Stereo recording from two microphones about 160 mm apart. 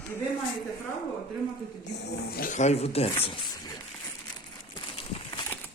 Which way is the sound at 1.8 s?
90° left.